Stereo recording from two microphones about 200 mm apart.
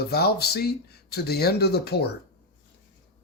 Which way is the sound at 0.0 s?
50° left (ahead or behind).